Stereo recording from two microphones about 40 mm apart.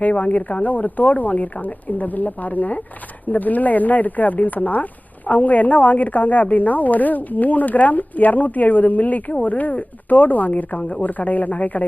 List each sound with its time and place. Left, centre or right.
0.0 s speech: left